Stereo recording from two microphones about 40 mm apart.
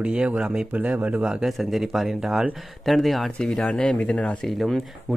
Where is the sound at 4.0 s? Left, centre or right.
Left.